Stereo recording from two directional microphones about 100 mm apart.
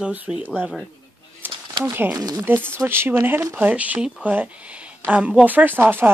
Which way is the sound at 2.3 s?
20° right (ahead or behind).